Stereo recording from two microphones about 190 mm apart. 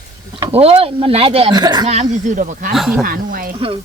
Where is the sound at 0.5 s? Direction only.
30° right (ahead or behind).